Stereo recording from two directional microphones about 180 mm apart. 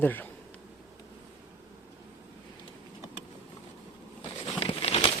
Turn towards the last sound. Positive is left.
turn(degrees=30)  # may be behind; listen again after turning